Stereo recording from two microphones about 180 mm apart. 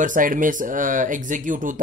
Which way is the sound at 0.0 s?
45° right (ahead or behind).